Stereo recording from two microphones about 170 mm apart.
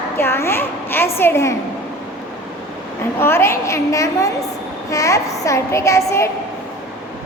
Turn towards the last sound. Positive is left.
turn(degrees=15)  # may be behind; listen again after turning